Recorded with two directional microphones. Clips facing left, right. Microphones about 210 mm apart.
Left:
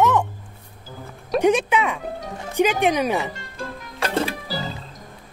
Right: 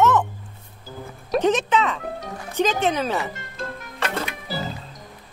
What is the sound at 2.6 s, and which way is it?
Speech, 15° left (ahead or behind).